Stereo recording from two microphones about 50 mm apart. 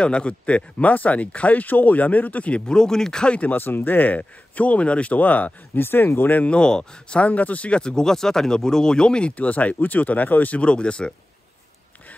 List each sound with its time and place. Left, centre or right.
0.0 s speech: left
2.6 s speech: centre
3.3 s a man's voice: left
5.8 s speech: left
6.4 s speech: centre
9.4 s a man's voice: left
10.6 s speech: left